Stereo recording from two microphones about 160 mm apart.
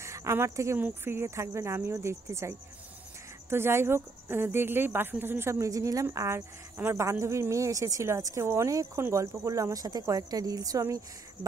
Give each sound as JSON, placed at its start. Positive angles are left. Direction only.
{"t": 0.0, "sound": "speech", "side_deg": -20}